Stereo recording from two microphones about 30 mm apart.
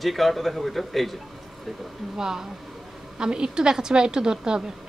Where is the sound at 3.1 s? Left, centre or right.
Right.